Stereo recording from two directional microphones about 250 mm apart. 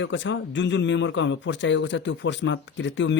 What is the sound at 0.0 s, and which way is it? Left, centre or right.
Speech, left.